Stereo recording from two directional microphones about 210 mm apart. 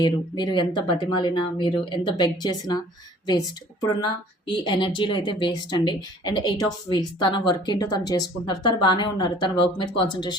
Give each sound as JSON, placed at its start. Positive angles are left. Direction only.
{"t": 0.0, "sound": "a woman's voice", "side_deg": 20}